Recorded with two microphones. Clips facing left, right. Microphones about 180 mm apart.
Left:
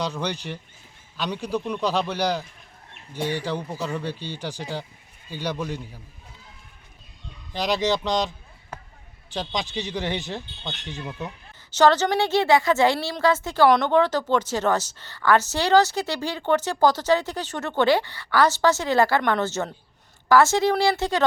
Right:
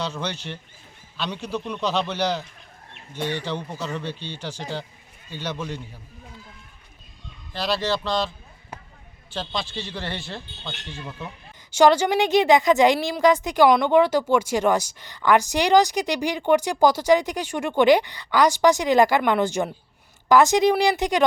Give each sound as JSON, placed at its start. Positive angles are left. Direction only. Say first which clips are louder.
{"t": 0.0, "sound": "speech", "louder": "left 1 dB", "side_deg": 10}
{"t": 7.5, "sound": "speech", "louder": "left 2 dB", "side_deg": 15}
{"t": 9.3, "sound": "speech", "louder": "left 1 dB", "side_deg": 15}
{"t": 11.7, "sound": "a woman's voice", "louder": "right 2 dB", "side_deg": -10}